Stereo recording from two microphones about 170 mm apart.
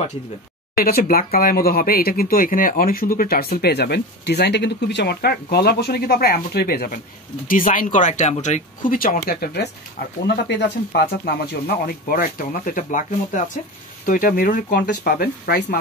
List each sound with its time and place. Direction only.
0.7 s speech: 60° left (ahead or behind)
7.4 s speech: 50° left (ahead or behind)
10.2 s speech: 80° left; by 15.8 s 65° left (ahead or behind)